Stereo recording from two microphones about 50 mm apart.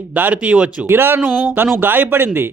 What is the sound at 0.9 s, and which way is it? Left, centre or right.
Speech, right.